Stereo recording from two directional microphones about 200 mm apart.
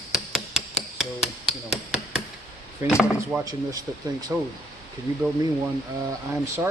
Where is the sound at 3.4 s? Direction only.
20° right (ahead or behind).